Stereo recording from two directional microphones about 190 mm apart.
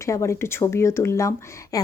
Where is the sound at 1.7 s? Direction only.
20° left (ahead or behind).